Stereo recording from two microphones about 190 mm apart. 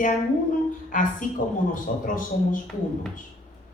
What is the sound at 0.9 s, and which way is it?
A woman's voice, 45° left (ahead or behind).